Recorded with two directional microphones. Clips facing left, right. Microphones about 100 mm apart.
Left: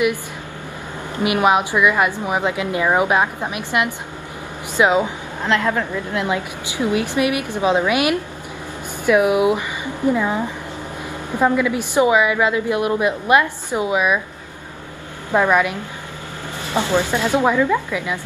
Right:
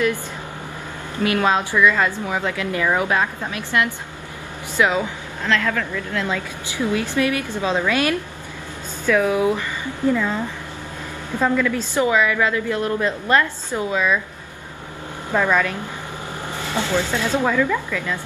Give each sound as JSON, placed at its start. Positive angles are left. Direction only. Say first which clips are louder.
{"t": 1.2, "sound": "a woman's voice", "louder": "left 3 dB", "side_deg": 15}
{"t": 15.3, "sound": "a woman's voice", "louder": "left 3 dB", "side_deg": 15}